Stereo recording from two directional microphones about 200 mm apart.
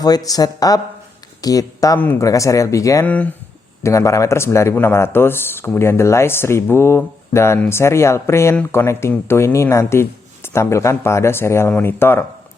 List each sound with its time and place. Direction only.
0.0 s speech: 20° left (ahead or behind)